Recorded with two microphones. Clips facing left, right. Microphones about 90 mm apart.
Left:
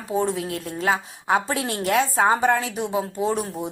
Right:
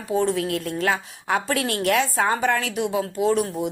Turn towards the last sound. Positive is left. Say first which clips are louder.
# right 3 dB
turn(degrees=25)  # may be behind; listen again after turning